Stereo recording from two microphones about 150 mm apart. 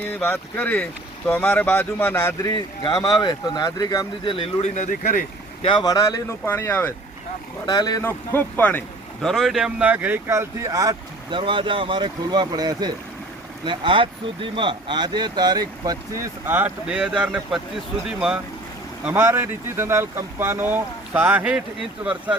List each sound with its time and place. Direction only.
0.0 s speech: 10° left (ahead or behind)
2.5 s speech: 25° left (ahead or behind); by 5.2 s 65° left (ahead or behind)
5.6 s speech: 25° left (ahead or behind)
7.7 s speech: 25° left (ahead or behind)
8.0 s speech: 15° left (ahead or behind)
9.2 s speech: centre (ahead or behind)
19.0 s speech: 15° right (ahead or behind)